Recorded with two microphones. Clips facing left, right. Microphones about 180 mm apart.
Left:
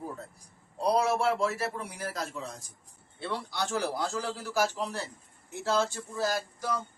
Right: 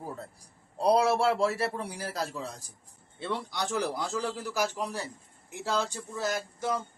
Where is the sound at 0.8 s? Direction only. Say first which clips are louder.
Right 3 dB; 30° right (ahead or behind).